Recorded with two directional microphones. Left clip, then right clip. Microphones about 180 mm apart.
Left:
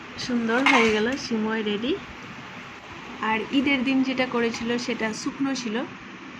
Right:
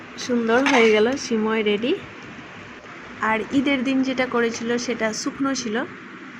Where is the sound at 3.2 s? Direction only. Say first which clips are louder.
Right 3 dB; 15° right (ahead or behind).